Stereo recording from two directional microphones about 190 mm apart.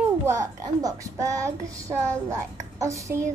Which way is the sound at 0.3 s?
15° right (ahead or behind).